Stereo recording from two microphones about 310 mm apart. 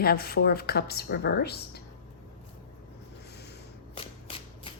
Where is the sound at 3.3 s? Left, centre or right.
Left.